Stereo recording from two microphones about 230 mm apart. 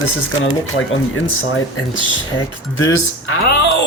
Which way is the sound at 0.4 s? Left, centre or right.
Left.